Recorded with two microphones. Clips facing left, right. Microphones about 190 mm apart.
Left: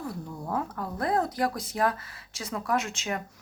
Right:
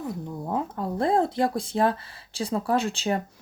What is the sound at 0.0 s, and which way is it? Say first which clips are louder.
Speech: right 3 dB; 20° right (ahead or behind).